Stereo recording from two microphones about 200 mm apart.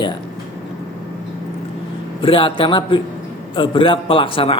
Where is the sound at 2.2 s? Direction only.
25° left (ahead or behind).